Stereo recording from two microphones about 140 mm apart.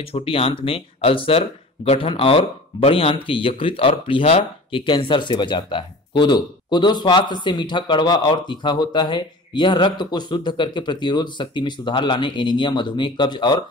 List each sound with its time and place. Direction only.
0.0 s speech: 40° left (ahead or behind)